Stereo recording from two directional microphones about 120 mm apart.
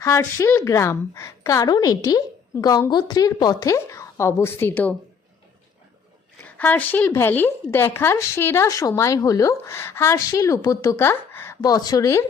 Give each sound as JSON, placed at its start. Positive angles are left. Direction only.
{"t": 0.0, "sound": "a woman's voice", "side_deg": 25}
{"t": 6.4, "sound": "a woman's voice", "side_deg": 15}
{"t": 11.6, "sound": "speech", "side_deg": 35}